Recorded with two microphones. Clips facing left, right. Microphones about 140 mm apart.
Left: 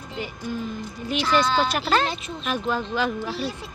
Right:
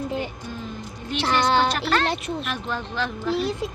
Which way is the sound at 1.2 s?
70° right (ahead or behind).